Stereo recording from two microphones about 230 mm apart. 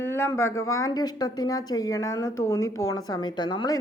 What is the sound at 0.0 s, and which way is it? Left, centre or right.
Speech, centre.